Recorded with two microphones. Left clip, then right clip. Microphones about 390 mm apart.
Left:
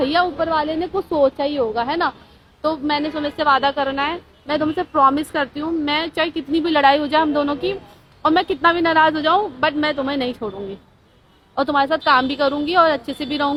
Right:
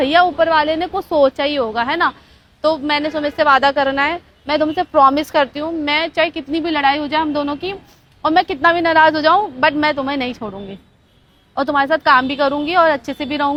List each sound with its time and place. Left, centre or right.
0.0 s a woman's voice: right
11.5 s a woman's voice: right